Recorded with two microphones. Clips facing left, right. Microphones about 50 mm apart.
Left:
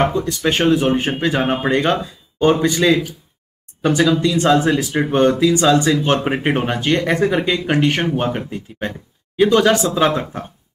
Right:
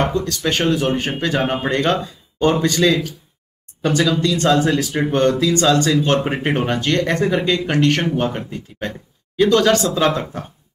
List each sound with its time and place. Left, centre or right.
0.0 s speech: centre